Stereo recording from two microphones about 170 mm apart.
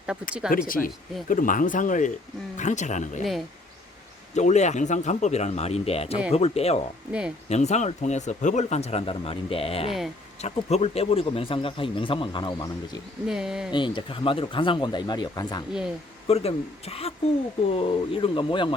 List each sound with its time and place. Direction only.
0.4 s speech: 5° right (ahead or behind)
1.3 s speech: 50° left (ahead or behind)
4.4 s a man's voice: 45° left (ahead or behind)
7.1 s speech: 5° right (ahead or behind)
7.5 s a man's voice: 40° left (ahead or behind); by 13.0 s 25° left (ahead or behind)
13.2 s speech: 5° right (ahead or behind)
13.7 s speech: 30° left (ahead or behind)
16.2 s a man's voice: 35° left (ahead or behind)